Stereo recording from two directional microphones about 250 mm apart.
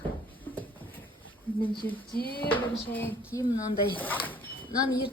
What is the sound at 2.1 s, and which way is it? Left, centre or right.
Speech, left.